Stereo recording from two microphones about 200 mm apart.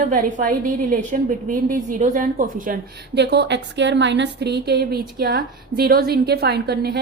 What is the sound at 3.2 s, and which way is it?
A woman's voice, 60° right (ahead or behind).